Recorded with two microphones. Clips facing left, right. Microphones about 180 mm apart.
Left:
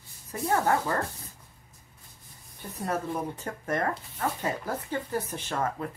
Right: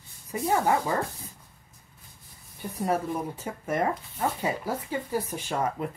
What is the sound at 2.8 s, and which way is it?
A woman's voice, 10° right (ahead or behind).